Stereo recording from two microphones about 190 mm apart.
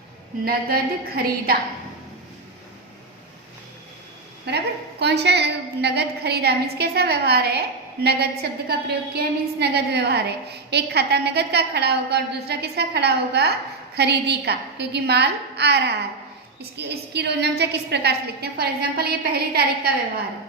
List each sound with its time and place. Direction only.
0.4 s a woman's voice: 50° right (ahead or behind)
4.4 s a woman's voice: 60° right (ahead or behind)